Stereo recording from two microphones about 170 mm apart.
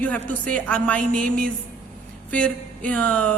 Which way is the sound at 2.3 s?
5° left (ahead or behind).